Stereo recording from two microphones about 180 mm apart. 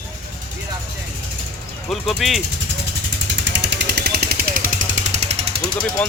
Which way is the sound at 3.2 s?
80° right.